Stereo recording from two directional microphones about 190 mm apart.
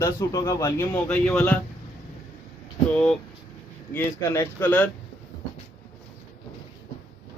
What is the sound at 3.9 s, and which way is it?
Speech, 15° left (ahead or behind).